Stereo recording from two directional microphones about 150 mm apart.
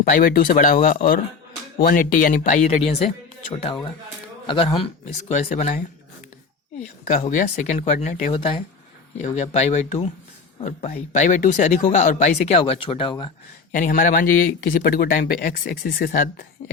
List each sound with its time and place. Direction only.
0.0 s speech: 65° left (ahead or behind); by 5.7 s 45° left (ahead or behind)
6.7 s speech: 55° left (ahead or behind)
9.2 s speech: 50° left (ahead or behind); by 13.3 s 35° left (ahead or behind)
13.7 s speech: 65° left (ahead or behind)